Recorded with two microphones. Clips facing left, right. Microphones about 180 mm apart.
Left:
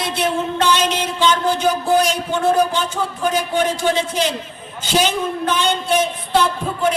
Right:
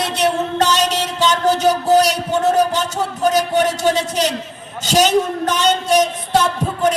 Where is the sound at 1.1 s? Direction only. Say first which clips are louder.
Right 2 dB; 40° right (ahead or behind).